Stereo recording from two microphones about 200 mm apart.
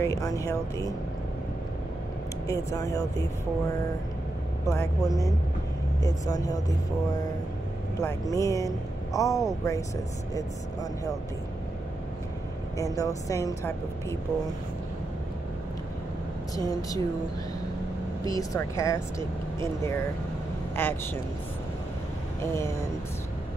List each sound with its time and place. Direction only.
0.0 s speech: 15° left (ahead or behind)
2.4 s speech: 15° left (ahead or behind)
4.6 s speech: 15° left (ahead or behind)
8.0 s speech: 15° left (ahead or behind)
12.7 s speech: 15° left (ahead or behind)
16.5 s speech: 20° left (ahead or behind)
18.2 s speech: 15° left (ahead or behind)